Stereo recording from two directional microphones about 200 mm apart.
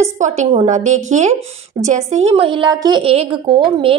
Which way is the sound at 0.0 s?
35° right (ahead or behind).